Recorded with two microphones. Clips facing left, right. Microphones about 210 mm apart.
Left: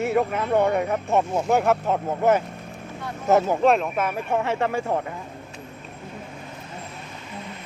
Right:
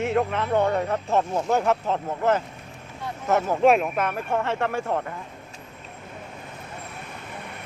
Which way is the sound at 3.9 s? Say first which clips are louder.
Left 1 dB; 5° left (ahead or behind).